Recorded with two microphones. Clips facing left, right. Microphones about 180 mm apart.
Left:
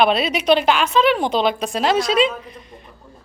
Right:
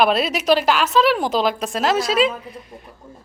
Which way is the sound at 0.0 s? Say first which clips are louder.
Left 1 dB; centre (ahead or behind).